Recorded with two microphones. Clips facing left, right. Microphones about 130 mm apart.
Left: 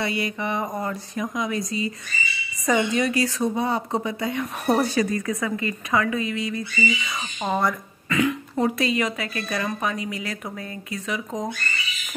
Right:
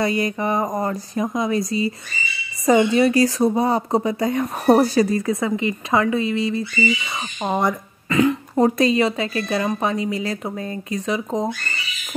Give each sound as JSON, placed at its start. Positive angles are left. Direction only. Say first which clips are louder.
{"t": 0.0, "sound": "speech", "louder": "right 5 dB", "side_deg": -40}
{"t": 8.2, "sound": "speech", "louder": "right 6 dB", "side_deg": -35}